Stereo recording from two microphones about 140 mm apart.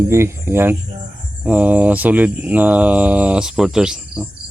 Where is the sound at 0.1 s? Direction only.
15° right (ahead or behind).